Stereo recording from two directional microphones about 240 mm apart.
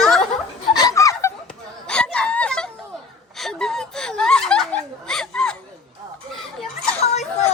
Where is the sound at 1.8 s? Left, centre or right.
Centre.